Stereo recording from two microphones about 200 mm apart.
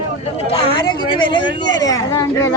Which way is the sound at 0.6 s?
25° left (ahead or behind).